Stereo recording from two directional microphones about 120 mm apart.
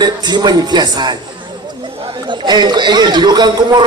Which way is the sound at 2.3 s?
40° right (ahead or behind).